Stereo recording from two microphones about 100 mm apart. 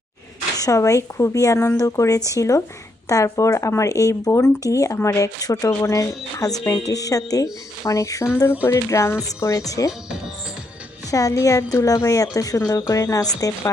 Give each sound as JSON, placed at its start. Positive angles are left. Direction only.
{"t": 0.5, "sound": "speech", "side_deg": 35}
{"t": 11.1, "sound": "speech", "side_deg": 35}